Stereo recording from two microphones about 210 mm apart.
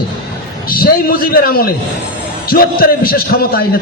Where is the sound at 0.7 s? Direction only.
45° left (ahead or behind).